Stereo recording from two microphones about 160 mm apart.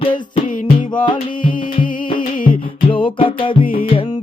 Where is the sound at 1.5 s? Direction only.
60° left (ahead or behind).